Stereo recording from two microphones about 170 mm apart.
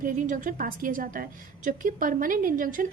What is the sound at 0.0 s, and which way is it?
A woman's voice, 50° right (ahead or behind).